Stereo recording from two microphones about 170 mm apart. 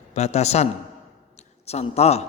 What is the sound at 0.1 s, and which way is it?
A man's voice, 40° left (ahead or behind).